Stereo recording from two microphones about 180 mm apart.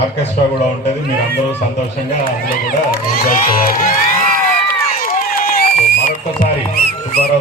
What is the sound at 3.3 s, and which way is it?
Speech, 50° left (ahead or behind).